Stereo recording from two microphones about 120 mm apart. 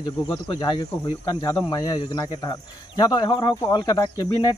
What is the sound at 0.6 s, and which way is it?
Speech, 35° left (ahead or behind).